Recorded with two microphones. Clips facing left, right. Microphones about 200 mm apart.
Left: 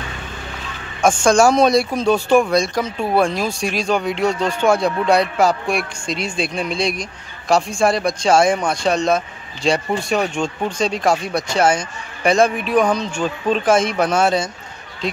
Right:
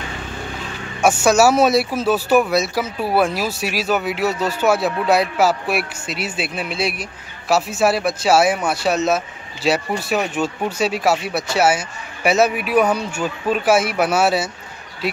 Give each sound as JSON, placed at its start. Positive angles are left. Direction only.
{"t": 1.0, "sound": "speech", "side_deg": -5}